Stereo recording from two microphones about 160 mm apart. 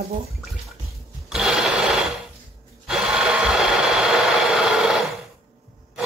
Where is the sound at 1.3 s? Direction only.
5° right (ahead or behind).